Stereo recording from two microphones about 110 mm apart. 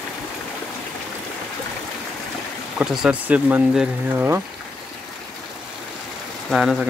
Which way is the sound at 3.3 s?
15° right (ahead or behind).